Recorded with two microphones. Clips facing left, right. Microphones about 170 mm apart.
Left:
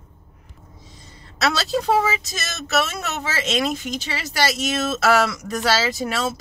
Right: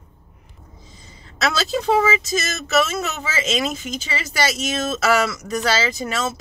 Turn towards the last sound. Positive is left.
turn(degrees=0)  # may be behind; listen again after turning